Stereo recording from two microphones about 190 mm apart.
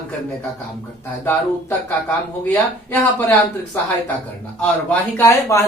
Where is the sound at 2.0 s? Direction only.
10° left (ahead or behind).